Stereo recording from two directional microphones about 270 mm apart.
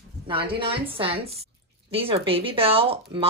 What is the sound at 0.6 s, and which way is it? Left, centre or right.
Speech, centre.